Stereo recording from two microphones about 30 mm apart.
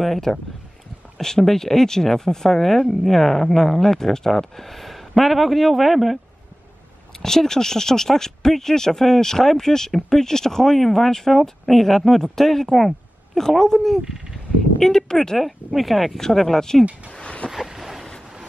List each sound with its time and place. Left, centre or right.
0.0 s speech: centre
7.2 s speech: centre
15.3 s speech: centre
16.2 s speech: centre
17.2 s a sound: left
17.7 s boat: centre